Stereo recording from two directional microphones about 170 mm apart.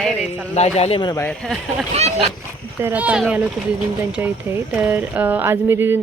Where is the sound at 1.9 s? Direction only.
40° right (ahead or behind).